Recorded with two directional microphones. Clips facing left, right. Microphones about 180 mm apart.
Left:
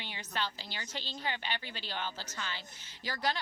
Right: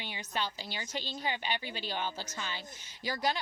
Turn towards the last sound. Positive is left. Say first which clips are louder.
# right 2 dB
turn(degrees=-15)  # may be behind; listen again after turning